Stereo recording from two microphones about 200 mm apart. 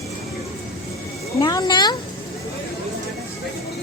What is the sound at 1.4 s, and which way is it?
Speech, 20° left (ahead or behind).